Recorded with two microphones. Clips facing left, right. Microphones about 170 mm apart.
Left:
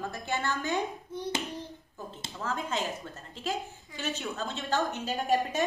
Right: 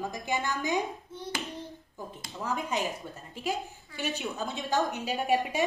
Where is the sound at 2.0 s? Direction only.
15° right (ahead or behind).